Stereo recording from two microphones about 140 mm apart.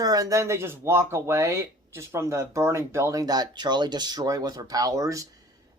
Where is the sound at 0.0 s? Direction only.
25° right (ahead or behind).